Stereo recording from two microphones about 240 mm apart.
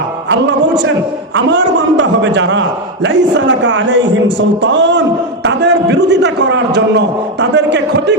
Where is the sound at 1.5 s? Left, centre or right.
Right.